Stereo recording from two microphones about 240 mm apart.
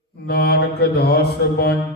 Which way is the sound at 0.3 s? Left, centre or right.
Left.